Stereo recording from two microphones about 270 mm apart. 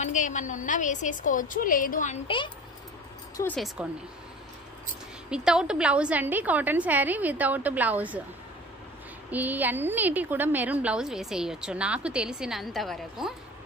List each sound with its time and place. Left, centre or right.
0.0 s a woman's voice: left
3.3 s a woman's voice: centre
5.3 s a woman's voice: centre
9.3 s a woman's voice: centre